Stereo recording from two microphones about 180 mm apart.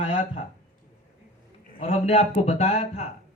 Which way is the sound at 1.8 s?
35° left (ahead or behind).